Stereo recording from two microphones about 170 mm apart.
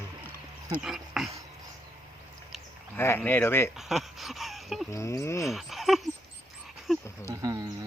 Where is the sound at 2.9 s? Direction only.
15° left (ahead or behind).